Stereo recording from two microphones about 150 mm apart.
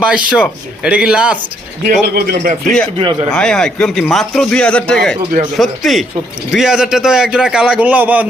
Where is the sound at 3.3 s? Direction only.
5° left (ahead or behind).